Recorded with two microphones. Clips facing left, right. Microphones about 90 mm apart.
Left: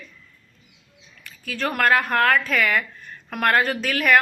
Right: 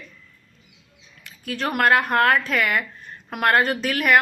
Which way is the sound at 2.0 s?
25° right (ahead or behind).